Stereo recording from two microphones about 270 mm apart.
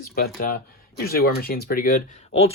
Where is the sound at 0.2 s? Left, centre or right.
Left.